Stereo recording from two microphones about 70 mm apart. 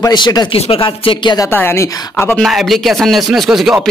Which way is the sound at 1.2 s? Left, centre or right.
Left.